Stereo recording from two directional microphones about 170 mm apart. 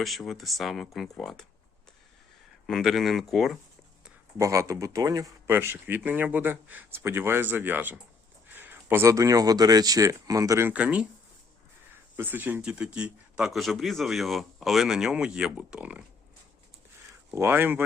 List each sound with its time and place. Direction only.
0.0 s speech: centre (ahead or behind)
2.6 s speech: centre (ahead or behind)
4.4 s speech: 20° right (ahead or behind)
12.1 s speech: 10° right (ahead or behind)
17.3 s speech: 15° right (ahead or behind)